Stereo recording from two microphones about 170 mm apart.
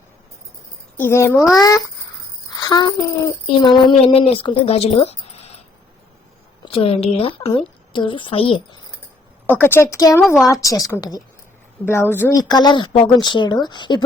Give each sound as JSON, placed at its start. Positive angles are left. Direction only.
{"t": 0.9, "sound": "a woman's voice", "side_deg": 15}
{"t": 2.5, "sound": "a sound", "side_deg": 25}
{"t": 3.4, "sound": "a woman's voice", "side_deg": 25}
{"t": 6.7, "sound": "a woman's voice", "side_deg": 35}
{"t": 9.5, "sound": "a woman's voice", "side_deg": 15}